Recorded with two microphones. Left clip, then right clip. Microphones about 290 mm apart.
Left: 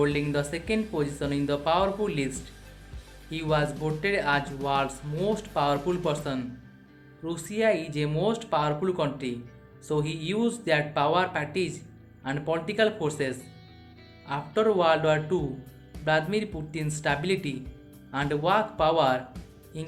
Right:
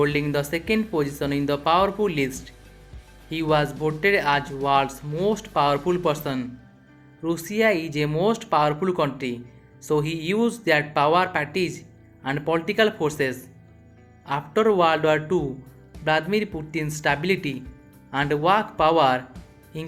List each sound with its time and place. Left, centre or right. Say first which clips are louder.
0.0 s speech: right 4 dB; centre